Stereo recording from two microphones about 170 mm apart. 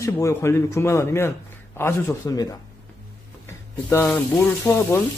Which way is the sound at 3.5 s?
15° left (ahead or behind).